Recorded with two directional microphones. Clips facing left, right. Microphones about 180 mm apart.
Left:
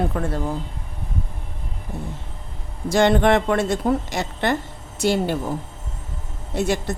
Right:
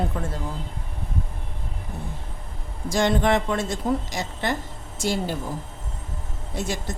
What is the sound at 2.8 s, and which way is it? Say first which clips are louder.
Speech: left 5 dB; 65° left (ahead or behind).